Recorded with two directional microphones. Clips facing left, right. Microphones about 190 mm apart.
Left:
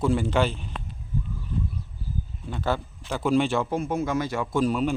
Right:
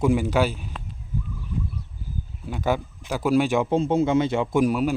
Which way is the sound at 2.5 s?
15° right (ahead or behind).